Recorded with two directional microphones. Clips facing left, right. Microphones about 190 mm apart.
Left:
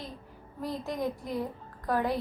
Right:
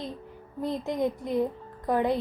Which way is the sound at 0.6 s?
20° right (ahead or behind).